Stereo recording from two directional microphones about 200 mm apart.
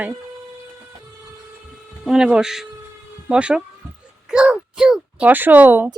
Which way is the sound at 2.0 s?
5° right (ahead or behind).